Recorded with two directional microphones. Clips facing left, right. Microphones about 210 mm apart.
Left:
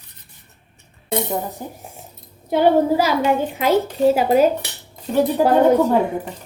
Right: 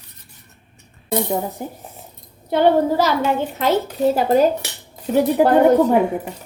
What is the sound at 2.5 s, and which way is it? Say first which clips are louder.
A woman's voice: even; 10° left (ahead or behind).